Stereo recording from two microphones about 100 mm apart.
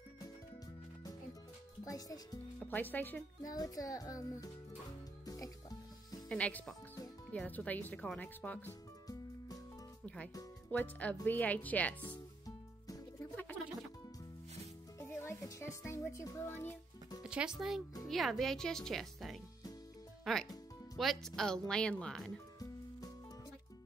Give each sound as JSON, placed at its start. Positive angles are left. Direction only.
{"t": 1.9, "sound": "a child's voice", "side_deg": 35}
{"t": 2.6, "sound": "speech", "side_deg": 20}
{"t": 3.5, "sound": "a child's voice", "side_deg": 40}
{"t": 5.2, "sound": "music", "side_deg": 40}
{"t": 6.2, "sound": "speech", "side_deg": 10}
{"t": 9.0, "sound": "music", "side_deg": 40}
{"t": 10.0, "sound": "speech", "side_deg": 10}
{"t": 15.0, "sound": "speech", "side_deg": 25}
{"t": 17.2, "sound": "speech", "side_deg": -10}